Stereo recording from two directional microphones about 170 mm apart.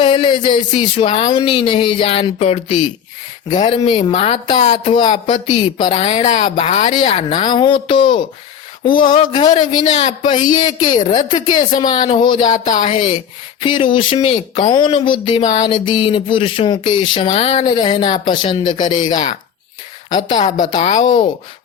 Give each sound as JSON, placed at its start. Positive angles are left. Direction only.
{"t": 0.0, "sound": "speech", "side_deg": 30}
{"t": 9.9, "sound": "speech", "side_deg": 40}
{"t": 10.2, "sound": "speech", "side_deg": 25}
{"t": 12.5, "sound": "speech", "side_deg": 45}
{"t": 12.9, "sound": "speech", "side_deg": 30}
{"t": 17.7, "sound": "speech", "side_deg": 25}
{"t": 18.7, "sound": "speech", "side_deg": 45}
{"t": 20.1, "sound": "a woman's voice", "side_deg": 25}